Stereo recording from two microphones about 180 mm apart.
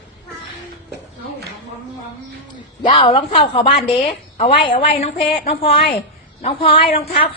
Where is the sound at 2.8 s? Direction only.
30° left (ahead or behind).